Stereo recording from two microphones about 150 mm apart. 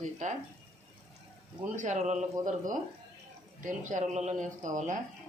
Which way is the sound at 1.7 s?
55° right (ahead or behind).